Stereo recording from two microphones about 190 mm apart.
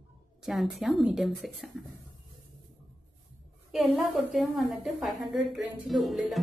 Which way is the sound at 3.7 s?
Centre (ahead or behind).